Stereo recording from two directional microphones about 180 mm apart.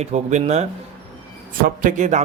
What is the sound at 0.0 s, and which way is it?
Speech, 40° right (ahead or behind).